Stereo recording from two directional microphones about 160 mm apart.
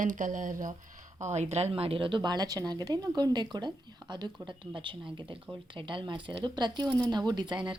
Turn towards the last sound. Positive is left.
turn(degrees=-30)  # may be behind; listen again after turning